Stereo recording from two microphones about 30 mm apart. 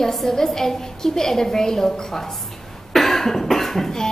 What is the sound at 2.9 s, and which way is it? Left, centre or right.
Cough, centre.